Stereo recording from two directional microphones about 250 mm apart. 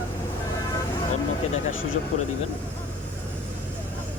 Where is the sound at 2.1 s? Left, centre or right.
Left.